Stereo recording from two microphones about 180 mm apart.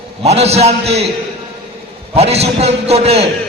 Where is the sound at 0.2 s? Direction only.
35° right (ahead or behind).